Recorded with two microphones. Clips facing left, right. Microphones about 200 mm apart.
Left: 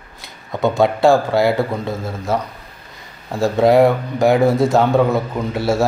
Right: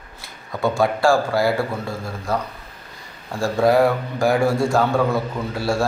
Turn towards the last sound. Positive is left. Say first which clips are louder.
# left 4 dB
turn(degrees=20)  # may be behind; listen again after turning